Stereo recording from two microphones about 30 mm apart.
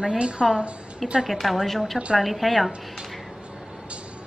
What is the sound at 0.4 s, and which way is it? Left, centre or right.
Speech, right.